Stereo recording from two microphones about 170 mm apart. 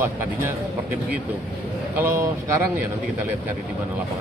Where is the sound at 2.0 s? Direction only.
15° right (ahead or behind).